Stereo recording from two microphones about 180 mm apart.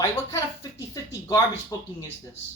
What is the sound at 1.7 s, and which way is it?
Speech, 20° left (ahead or behind).